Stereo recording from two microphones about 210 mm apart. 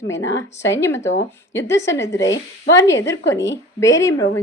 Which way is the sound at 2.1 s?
60° left (ahead or behind).